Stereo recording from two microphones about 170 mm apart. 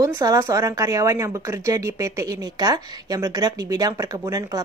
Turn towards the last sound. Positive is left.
turn(degrees=-20)  # may be behind; listen again after turning